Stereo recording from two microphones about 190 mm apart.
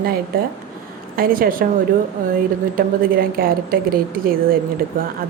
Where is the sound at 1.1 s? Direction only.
50° right (ahead or behind).